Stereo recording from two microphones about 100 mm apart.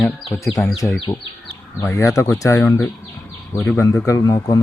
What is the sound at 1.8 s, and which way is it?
Speech, 30° left (ahead or behind).